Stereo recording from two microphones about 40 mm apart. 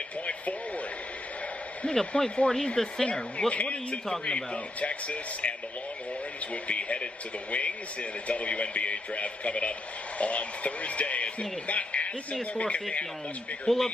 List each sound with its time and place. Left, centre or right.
0.3 s a sound: left
2.0 s speech: centre
4.7 s a man's voice: left
6.5 s a man's voice: left
13.7 s speech: centre